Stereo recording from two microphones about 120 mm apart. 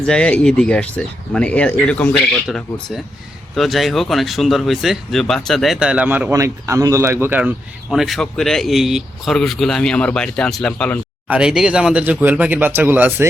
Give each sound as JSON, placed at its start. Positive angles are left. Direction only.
{"t": 0.0, "sound": "speech", "side_deg": 10}
{"t": 6.3, "sound": "speech", "side_deg": -25}
{"t": 7.9, "sound": "speech", "side_deg": 0}
{"t": 11.3, "sound": "speech", "side_deg": -5}